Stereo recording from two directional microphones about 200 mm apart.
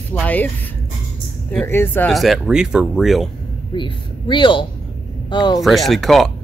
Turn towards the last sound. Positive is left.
turn(degrees=0)  # may be behind; listen again after turning